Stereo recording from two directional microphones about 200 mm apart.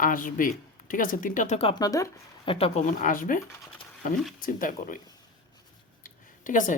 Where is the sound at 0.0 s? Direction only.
45° left (ahead or behind).